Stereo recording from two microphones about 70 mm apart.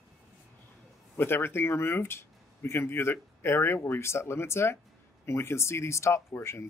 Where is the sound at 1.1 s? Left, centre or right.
Left.